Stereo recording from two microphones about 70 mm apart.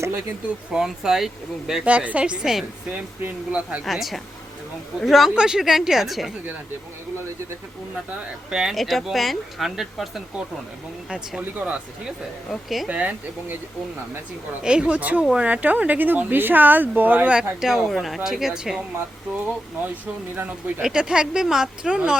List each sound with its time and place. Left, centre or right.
0.7 s speech: centre
1.8 s speech: right
2.9 s speech: centre
3.8 s speech: centre
8.4 s speech: centre
11.1 s speech: centre
12.5 s speech: centre
12.9 s speech: right
14.6 s speech: centre
17.6 s speech: centre
20.3 s speech: right
20.8 s speech: centre